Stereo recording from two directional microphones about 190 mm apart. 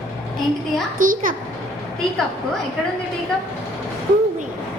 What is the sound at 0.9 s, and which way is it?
Speech, 45° right (ahead or behind).